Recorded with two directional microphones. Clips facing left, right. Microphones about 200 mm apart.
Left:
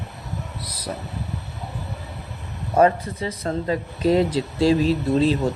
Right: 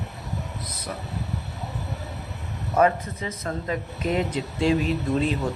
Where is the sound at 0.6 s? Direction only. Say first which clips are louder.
Left 2 dB; 35° left (ahead or behind).